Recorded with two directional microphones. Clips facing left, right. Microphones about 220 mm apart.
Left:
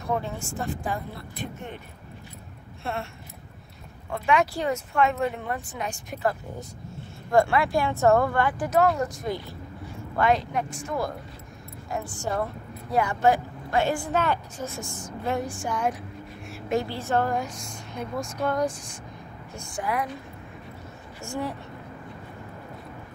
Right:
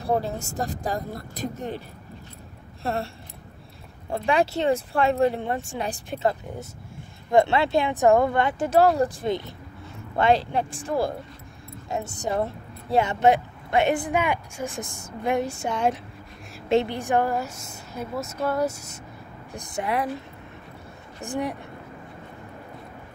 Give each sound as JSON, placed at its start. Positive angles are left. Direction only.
{"t": 0.0, "sound": "speech", "side_deg": -35}
{"t": 2.8, "sound": "a sound", "side_deg": -35}
{"t": 4.1, "sound": "a woman's voice", "side_deg": -30}
{"t": 19.5, "sound": "speech", "side_deg": -20}
{"t": 21.2, "sound": "a woman's voice", "side_deg": -15}